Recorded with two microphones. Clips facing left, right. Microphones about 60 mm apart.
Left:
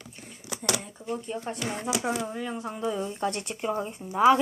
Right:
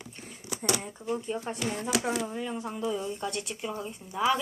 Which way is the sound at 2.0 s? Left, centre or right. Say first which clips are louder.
Left 1 dB; centre.